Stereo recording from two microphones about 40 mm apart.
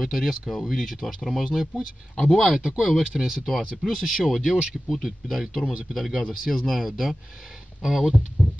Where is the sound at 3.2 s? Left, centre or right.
Centre.